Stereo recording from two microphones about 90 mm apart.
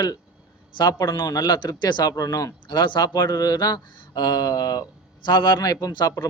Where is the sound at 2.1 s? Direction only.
40° left (ahead or behind).